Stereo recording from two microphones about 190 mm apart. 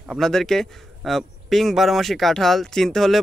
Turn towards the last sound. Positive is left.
turn(degrees=0)  # may be behind; listen again after turning